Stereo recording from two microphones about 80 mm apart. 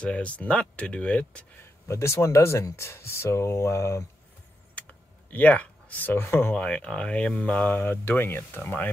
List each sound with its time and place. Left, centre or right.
0.0 s speech: centre
1.6 s speech: left
4.7 s a sound: centre
6.5 s speech: centre